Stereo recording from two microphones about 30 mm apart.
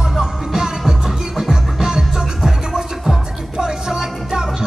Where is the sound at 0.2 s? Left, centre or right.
Centre.